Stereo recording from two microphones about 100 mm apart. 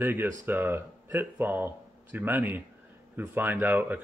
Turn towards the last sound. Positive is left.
turn(degrees=-20)  # may be behind; listen again after turning